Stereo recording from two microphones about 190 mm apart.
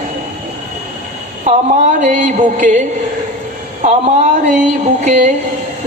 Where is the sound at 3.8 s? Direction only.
40° right (ahead or behind).